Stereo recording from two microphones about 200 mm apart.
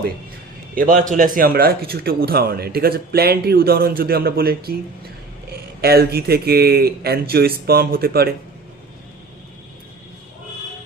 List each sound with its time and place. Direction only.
0.8 s a man's voice: 40° right (ahead or behind)
5.8 s a man's voice: 50° right (ahead or behind)